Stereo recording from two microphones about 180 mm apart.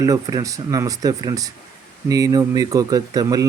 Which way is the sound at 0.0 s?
20° right (ahead or behind).